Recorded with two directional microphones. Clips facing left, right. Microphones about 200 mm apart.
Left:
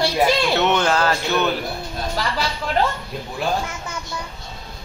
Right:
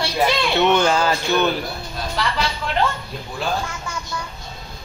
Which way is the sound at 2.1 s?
40° left (ahead or behind).